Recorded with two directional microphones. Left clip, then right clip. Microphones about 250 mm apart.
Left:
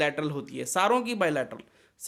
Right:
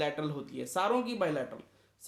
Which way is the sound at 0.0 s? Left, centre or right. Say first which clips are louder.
Left 6 dB; left.